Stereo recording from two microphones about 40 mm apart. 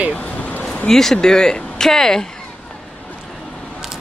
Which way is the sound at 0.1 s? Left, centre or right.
Left.